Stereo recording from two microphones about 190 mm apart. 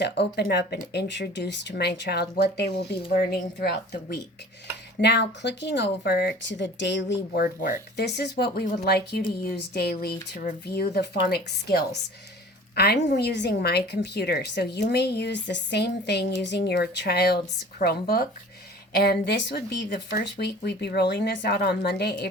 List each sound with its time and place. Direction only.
0.0 s a woman's voice: 60° left (ahead or behind)